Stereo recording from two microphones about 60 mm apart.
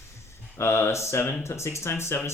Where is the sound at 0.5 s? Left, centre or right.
Left.